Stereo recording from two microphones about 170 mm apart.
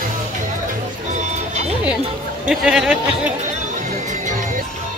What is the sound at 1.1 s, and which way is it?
Vehicle, 45° right (ahead or behind).